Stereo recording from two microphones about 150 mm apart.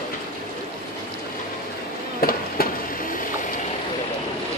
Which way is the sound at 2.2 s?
75° left (ahead or behind).